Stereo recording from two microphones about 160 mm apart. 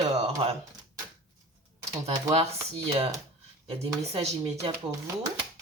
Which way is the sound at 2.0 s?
40° right (ahead or behind).